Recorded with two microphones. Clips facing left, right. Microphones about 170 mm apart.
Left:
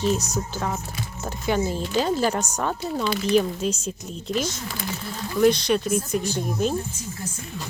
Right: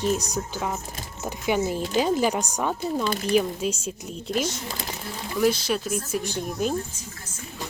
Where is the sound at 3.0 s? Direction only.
45° right (ahead or behind).